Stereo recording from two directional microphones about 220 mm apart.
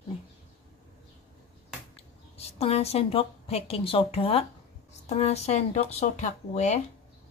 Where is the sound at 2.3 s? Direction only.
30° left (ahead or behind).